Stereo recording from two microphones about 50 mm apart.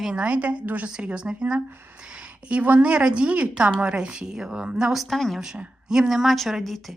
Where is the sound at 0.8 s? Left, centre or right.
Centre.